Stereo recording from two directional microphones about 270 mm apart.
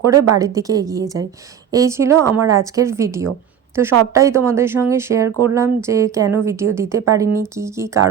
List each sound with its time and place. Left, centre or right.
0.0 s speech: centre